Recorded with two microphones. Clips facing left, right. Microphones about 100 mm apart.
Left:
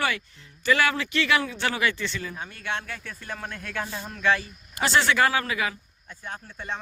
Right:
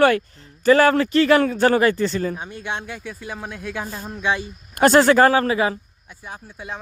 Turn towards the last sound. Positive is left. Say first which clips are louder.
# right 1 dB
turn(degrees=-5)  # may be behind; listen again after turning